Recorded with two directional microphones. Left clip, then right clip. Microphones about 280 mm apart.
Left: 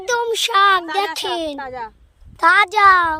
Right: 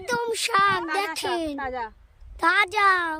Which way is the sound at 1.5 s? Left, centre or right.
Centre.